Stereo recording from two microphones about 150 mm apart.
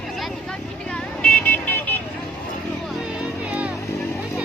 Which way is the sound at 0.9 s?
10° left (ahead or behind).